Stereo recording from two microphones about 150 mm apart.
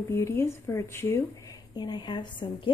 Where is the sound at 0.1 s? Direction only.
15° left (ahead or behind).